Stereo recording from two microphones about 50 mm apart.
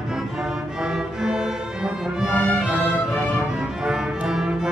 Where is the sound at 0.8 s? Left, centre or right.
Centre.